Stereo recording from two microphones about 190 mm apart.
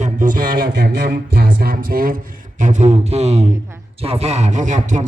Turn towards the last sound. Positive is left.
turn(degrees=-40)  # may be behind; listen again after turning